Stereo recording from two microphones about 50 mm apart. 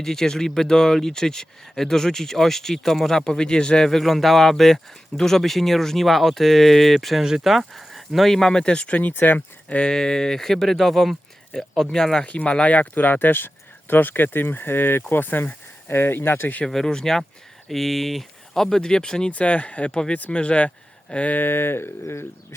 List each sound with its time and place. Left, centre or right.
0.0 s speech: centre
3.8 s speech: centre; by 9.9 s left
9.9 s speech: centre
12.2 s speech: left
16.6 s speech: centre
19.3 s speech: left
21.3 s speech: left
22.0 s speech: left